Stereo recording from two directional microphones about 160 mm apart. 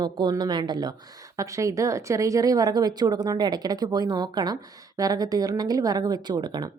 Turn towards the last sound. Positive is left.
turn(degrees=-25)  # may be behind; listen again after turning